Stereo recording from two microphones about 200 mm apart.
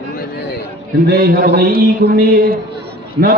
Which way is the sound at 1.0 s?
50° right (ahead or behind).